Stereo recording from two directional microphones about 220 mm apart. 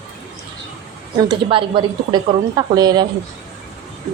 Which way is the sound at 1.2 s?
25° right (ahead or behind).